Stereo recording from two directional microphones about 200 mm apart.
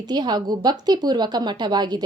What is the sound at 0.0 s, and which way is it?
A woman's voice, 20° right (ahead or behind).